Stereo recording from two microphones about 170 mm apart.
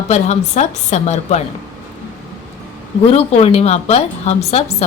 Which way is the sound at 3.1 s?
35° left (ahead or behind).